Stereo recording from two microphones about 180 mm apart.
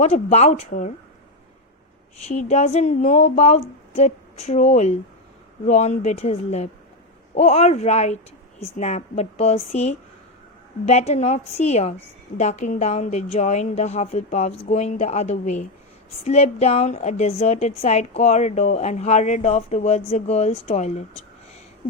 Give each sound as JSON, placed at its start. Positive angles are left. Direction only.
{"t": 0.0, "sound": "a woman's voice", "side_deg": 40}
{"t": 2.2, "sound": "a woman's voice", "side_deg": 40}